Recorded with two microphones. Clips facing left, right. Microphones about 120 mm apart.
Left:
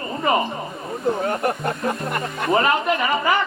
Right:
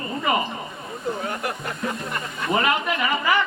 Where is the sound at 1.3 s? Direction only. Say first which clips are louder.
Left 6 dB; 55° left (ahead or behind).